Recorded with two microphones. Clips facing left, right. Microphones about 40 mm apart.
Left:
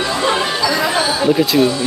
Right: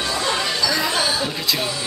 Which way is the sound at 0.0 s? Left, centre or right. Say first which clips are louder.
Left 5 dB; left.